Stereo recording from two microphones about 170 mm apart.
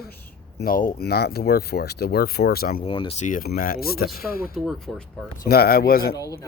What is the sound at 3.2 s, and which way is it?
Speech, 55° left (ahead or behind).